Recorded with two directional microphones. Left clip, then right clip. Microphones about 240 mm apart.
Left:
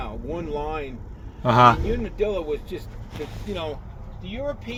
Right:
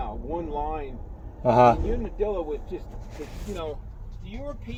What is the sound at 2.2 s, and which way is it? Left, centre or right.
Speech, centre.